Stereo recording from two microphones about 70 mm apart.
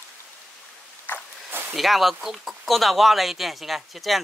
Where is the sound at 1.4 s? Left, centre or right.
Right.